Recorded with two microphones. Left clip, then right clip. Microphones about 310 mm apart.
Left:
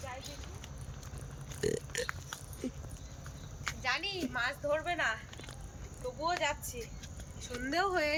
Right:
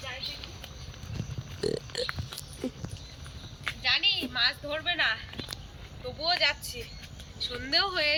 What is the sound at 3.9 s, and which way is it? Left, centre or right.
A woman's voice, centre.